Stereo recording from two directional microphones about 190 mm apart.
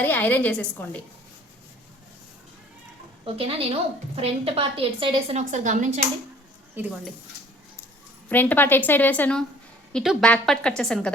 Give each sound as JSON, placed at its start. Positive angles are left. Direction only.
{"t": 0.0, "sound": "a woman's voice", "side_deg": 10}
{"t": 3.3, "sound": "a woman's voice", "side_deg": -30}
{"t": 5.5, "sound": "a woman's voice", "side_deg": -40}
{"t": 6.7, "sound": "a woman's voice", "side_deg": -5}
{"t": 8.3, "sound": "a woman's voice", "side_deg": 10}